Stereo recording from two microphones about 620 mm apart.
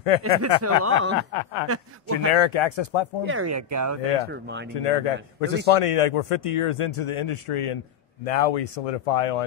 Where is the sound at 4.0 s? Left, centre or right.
Left.